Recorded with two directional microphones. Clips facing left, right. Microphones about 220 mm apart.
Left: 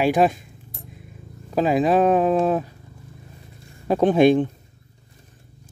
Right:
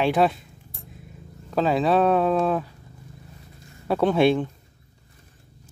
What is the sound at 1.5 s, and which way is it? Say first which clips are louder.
Speech: left 2 dB; 10° left (ahead or behind).